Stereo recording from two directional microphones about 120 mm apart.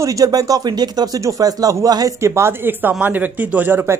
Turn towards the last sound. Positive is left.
turn(degrees=-20)  # may be behind; listen again after turning